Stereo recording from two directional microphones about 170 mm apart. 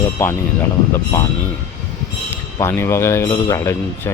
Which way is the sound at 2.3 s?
15° left (ahead or behind).